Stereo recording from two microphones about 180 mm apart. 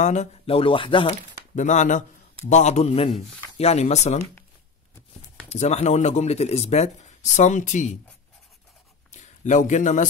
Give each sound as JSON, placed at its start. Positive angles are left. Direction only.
{"t": 0.0, "sound": "speech", "side_deg": 40}
{"t": 1.5, "sound": "speech", "side_deg": 40}
{"t": 5.5, "sound": "speech", "side_deg": 40}
{"t": 9.1, "sound": "speech", "side_deg": 40}